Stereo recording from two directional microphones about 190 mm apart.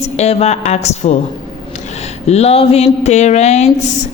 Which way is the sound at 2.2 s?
35° left (ahead or behind).